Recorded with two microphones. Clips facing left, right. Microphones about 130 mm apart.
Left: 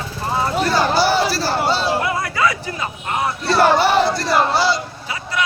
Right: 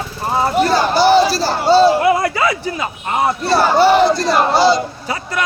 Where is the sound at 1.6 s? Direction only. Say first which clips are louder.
Right 13 dB; 35° right (ahead or behind).